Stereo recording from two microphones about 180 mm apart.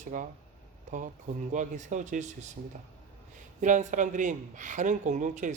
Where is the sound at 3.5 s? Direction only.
45° right (ahead or behind).